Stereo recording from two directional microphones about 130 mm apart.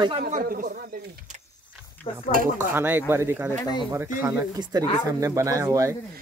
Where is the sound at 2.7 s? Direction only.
15° right (ahead or behind).